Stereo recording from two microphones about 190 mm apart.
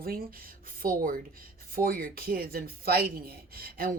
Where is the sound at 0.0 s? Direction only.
50° right (ahead or behind).